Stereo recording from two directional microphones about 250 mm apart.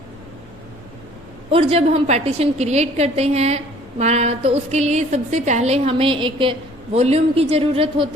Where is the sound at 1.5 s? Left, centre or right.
Right.